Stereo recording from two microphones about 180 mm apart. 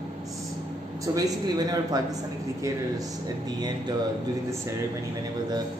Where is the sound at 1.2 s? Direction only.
20° right (ahead or behind).